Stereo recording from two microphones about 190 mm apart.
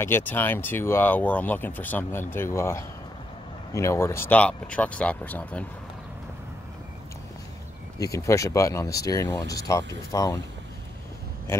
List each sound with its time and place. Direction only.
0.0 s speech: 10° left (ahead or behind)
8.0 s speech: 15° left (ahead or behind)